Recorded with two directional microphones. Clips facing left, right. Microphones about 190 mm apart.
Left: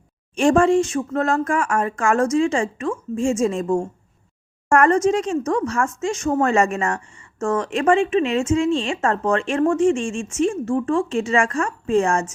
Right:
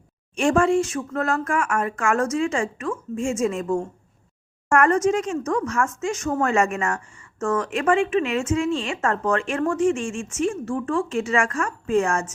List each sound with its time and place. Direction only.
0.3 s speech: 30° left (ahead or behind)